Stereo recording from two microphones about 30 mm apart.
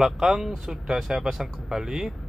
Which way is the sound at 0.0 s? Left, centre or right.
Centre.